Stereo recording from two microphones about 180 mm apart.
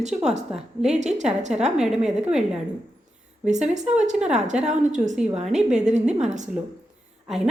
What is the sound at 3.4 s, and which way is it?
A woman's voice, 40° right (ahead or behind).